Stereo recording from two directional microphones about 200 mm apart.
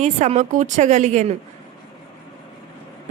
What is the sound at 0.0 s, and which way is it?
A woman's voice, 35° right (ahead or behind).